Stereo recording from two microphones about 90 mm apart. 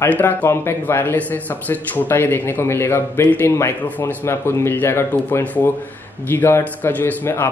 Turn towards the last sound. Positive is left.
turn(degrees=25)  # may be behind; listen again after turning